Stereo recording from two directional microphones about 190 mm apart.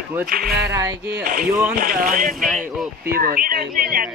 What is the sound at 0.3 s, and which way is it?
Speech, 50° right (ahead or behind).